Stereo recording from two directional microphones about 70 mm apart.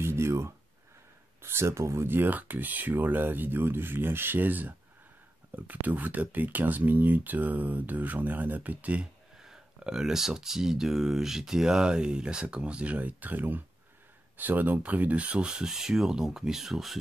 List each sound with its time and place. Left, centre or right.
0.0 s a sound: right
1.4 s speech: right
2.0 s speech: right
9.4 s speech: centre